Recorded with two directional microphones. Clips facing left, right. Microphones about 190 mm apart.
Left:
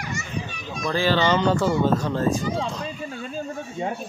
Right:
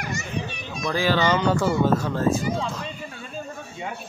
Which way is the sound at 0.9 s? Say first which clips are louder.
Left 1 dB; 10° right (ahead or behind).